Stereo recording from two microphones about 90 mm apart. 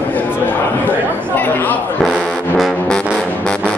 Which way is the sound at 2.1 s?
15° left (ahead or behind).